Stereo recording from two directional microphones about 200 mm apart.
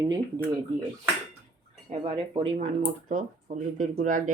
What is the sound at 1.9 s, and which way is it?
Speech, 25° right (ahead or behind).